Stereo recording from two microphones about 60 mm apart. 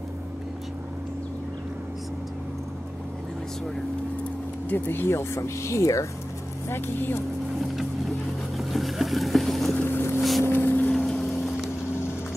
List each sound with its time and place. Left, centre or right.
4.6 s speech: left
6.7 s speech: left
8.5 s boat: centre
9.8 s boat: left
10.4 s vehicle: left
10.9 s vehicle: centre